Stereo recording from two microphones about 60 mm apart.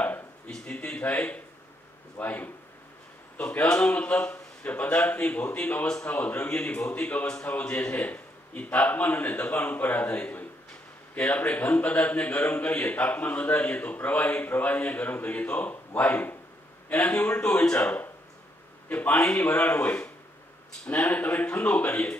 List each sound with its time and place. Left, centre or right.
0.5 s a man's voice: centre
3.6 s speech: centre